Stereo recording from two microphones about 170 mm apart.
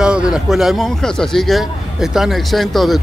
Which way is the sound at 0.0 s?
5° right (ahead or behind).